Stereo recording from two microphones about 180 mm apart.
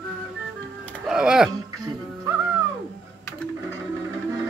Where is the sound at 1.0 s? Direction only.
5° right (ahead or behind).